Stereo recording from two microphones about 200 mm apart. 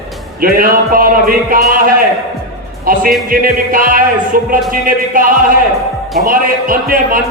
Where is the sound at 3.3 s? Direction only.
45° right (ahead or behind).